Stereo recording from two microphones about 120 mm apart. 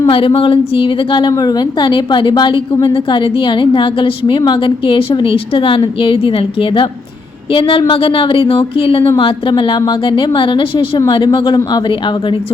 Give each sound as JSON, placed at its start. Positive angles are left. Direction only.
{"t": 0.1, "sound": "a woman's voice", "side_deg": 45}
{"t": 1.3, "sound": "a woman's voice", "side_deg": 30}